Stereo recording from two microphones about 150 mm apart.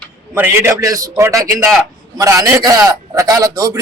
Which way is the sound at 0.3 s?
15° right (ahead or behind).